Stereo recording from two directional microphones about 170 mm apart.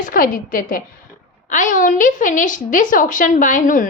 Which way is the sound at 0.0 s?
55° left (ahead or behind).